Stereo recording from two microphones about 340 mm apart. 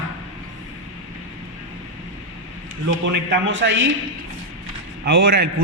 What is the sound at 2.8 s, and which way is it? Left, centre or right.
A man's voice, right.